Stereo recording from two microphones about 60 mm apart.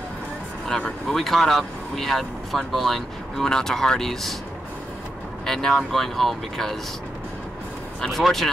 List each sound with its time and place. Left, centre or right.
0.7 s speech: centre
1.0 s speech: centre
5.4 s speech: centre
8.0 s speech: centre